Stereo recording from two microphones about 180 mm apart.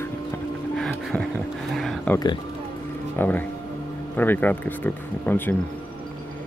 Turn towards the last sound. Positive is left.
turn(degrees=10)  # may be behind; listen again after turning